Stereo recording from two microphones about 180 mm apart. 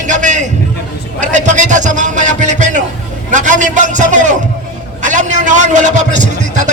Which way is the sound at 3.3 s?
45° right (ahead or behind).